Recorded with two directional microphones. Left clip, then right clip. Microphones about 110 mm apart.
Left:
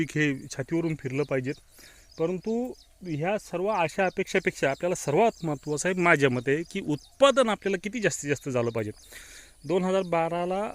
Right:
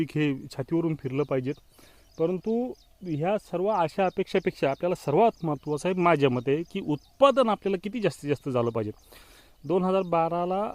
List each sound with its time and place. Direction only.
0.0 s speech: 30° right (ahead or behind)
0.3 s speech: 45° right (ahead or behind)
4.0 s speech: 40° right (ahead or behind)